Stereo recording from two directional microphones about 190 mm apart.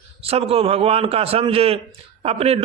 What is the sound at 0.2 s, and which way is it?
A man's voice, 30° right (ahead or behind).